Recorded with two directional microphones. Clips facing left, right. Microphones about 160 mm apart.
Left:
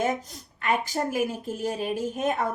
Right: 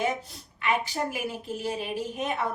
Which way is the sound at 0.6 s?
45° left (ahead or behind).